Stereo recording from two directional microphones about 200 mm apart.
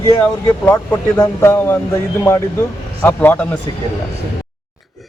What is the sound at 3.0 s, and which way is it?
Speech, 10° left (ahead or behind).